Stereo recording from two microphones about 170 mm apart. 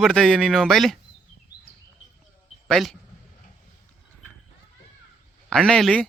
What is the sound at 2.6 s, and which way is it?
Speech, centre (ahead or behind).